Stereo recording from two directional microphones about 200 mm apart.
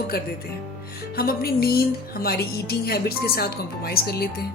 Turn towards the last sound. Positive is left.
turn(degrees=50)  # may be behind; listen again after turning